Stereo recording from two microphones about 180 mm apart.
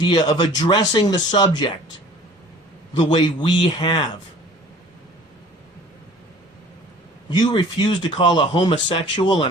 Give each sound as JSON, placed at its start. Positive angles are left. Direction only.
{"t": 0.0, "sound": "speech", "side_deg": 20}
{"t": 3.0, "sound": "speech", "side_deg": 25}
{"t": 7.3, "sound": "speech", "side_deg": 25}